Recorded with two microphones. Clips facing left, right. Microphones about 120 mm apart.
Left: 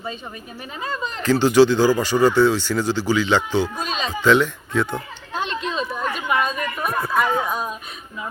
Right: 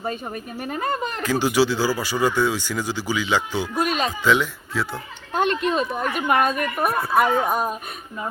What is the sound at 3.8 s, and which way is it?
Speech, 60° right (ahead or behind).